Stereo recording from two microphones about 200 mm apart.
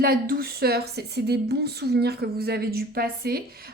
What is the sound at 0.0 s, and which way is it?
A woman's voice, 50° right (ahead or behind).